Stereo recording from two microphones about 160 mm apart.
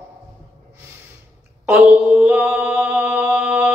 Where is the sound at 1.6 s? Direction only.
15° right (ahead or behind).